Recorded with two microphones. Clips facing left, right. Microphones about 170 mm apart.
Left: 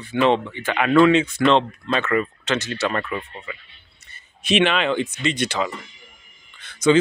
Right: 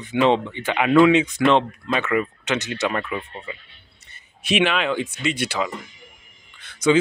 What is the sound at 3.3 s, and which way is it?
Speech, 25° right (ahead or behind).